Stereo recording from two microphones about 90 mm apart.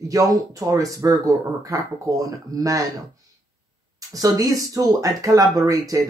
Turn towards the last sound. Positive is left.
turn(degrees=-40)  # may be behind; listen again after turning